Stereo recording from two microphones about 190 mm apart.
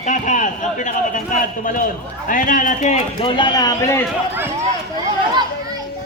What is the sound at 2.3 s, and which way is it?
Speech, 45° left (ahead or behind).